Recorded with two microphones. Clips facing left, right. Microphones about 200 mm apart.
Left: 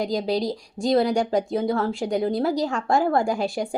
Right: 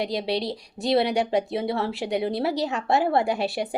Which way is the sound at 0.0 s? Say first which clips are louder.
Left 3 dB; 45° left (ahead or behind).